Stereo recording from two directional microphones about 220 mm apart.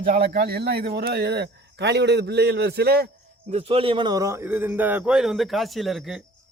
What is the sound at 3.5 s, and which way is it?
Speech, 25° right (ahead or behind).